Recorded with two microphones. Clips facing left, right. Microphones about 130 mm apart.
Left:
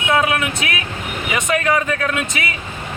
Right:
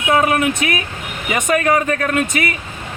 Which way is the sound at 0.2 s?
40° right (ahead or behind).